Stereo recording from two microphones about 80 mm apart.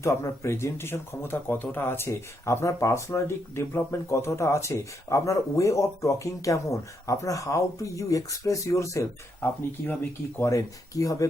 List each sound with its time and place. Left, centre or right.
0.0 s speech: left
9.4 s speech: left
10.5 s speech: left